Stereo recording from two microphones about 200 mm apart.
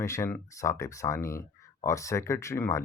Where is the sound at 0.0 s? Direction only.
15° left (ahead or behind).